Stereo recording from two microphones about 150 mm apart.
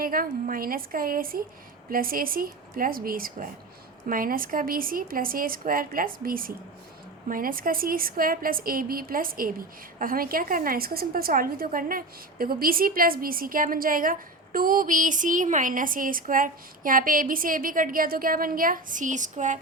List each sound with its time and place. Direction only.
0.0 s a woman's voice: 70° right (ahead or behind); by 19.5 s 55° right (ahead or behind)